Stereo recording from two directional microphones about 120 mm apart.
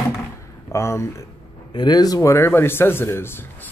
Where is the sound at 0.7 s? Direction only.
25° left (ahead or behind).